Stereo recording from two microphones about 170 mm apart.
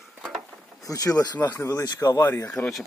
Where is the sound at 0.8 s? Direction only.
20° left (ahead or behind).